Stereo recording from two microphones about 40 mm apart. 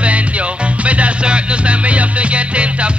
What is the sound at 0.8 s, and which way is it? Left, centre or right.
Music, right.